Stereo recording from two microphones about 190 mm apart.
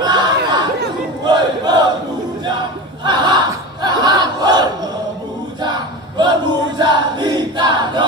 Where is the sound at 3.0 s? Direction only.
25° right (ahead or behind).